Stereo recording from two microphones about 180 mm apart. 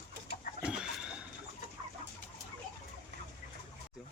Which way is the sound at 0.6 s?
5° right (ahead or behind).